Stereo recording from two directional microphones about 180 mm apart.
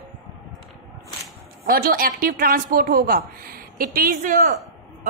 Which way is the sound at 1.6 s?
55° right (ahead or behind).